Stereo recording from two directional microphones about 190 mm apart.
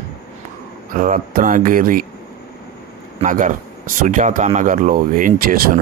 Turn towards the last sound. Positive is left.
turn(degrees=-50)  # may be behind; listen again after turning